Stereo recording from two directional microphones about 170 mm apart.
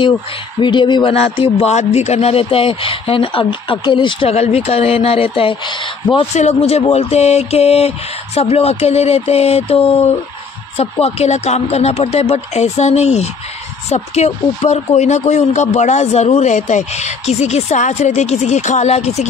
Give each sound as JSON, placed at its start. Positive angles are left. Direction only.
{"t": 0.6, "sound": "a man's voice", "side_deg": 25}